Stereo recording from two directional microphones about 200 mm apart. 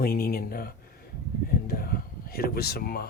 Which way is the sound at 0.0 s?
50° left (ahead or behind).